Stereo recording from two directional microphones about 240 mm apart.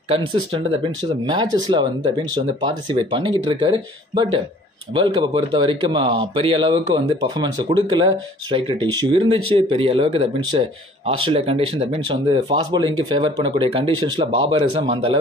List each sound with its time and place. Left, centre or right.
0.2 s speech: right